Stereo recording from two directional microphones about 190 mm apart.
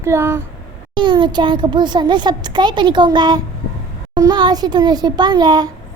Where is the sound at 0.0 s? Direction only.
15° right (ahead or behind).